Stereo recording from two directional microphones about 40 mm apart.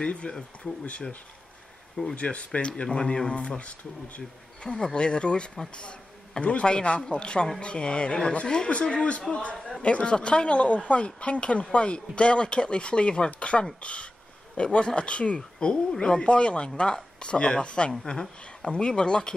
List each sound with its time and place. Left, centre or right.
0.0 s speech: left
2.1 s speech: left
3.0 s speech: centre
4.6 s speech: centre